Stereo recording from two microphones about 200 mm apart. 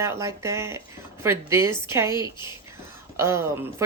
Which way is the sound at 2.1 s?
20° left (ahead or behind).